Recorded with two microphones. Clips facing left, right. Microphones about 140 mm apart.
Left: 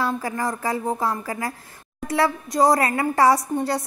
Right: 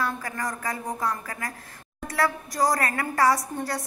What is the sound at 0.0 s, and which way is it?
A woman's voice, 25° left (ahead or behind).